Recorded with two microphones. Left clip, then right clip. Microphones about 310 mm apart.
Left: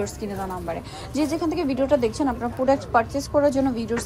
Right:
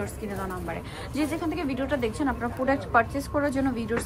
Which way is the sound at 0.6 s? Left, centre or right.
Centre.